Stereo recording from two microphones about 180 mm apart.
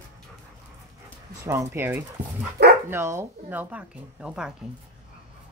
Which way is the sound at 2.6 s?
65° right (ahead or behind).